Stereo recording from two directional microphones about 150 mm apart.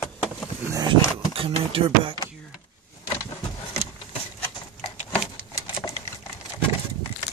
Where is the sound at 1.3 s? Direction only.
40° right (ahead or behind).